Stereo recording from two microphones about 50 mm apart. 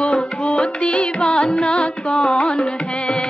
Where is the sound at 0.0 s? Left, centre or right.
Left.